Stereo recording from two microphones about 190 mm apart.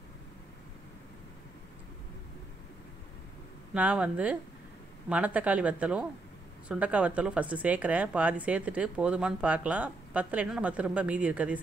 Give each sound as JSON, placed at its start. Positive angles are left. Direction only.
{"t": 3.7, "sound": "speech", "side_deg": -5}